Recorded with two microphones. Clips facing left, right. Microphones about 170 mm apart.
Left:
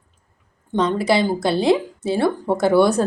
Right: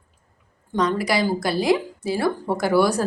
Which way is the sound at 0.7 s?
25° left (ahead or behind).